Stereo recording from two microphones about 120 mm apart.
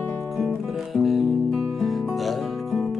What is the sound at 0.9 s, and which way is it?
Music, centre (ahead or behind).